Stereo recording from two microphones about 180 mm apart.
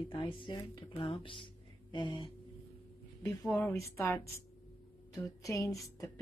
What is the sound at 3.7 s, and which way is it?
A woman's voice, 15° left (ahead or behind).